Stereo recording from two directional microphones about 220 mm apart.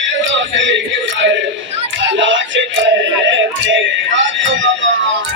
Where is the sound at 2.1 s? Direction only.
60° right (ahead or behind).